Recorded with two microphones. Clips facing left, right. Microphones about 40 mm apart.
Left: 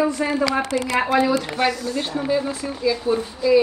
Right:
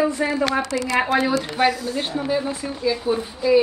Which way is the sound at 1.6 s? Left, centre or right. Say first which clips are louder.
Right 1 dB; centre.